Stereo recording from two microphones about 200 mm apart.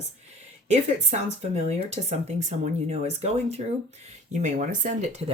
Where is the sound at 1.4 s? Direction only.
35° right (ahead or behind).